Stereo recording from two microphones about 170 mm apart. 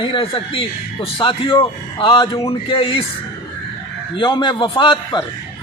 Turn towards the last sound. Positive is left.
turn(degrees=30)  # may be behind; listen again after turning